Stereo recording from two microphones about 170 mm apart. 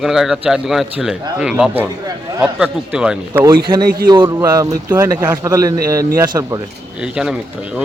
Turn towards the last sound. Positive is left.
turn(degrees=-5)  # may be behind; listen again after turning